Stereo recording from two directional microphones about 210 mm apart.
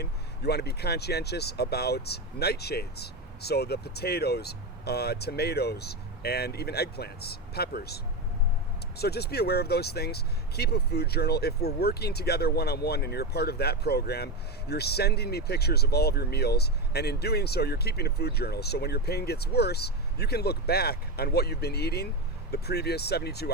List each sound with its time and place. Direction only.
0.0 s speech: 50° left (ahead or behind)